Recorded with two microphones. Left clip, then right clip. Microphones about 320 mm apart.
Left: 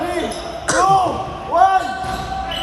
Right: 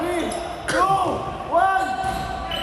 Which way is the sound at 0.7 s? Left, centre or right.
Centre.